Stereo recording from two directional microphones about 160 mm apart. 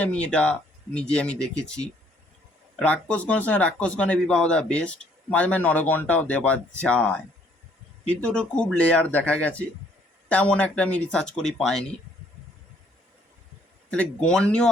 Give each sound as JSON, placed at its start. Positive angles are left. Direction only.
{"t": 0.0, "sound": "speech", "side_deg": 5}
{"t": 13.9, "sound": "speech", "side_deg": 5}